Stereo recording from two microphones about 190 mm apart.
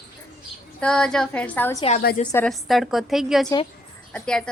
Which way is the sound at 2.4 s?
Centre (ahead or behind).